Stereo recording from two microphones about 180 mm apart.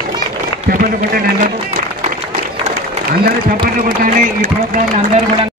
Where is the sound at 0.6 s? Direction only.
50° right (ahead or behind).